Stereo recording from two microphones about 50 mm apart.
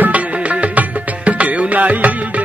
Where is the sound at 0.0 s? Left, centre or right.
Right.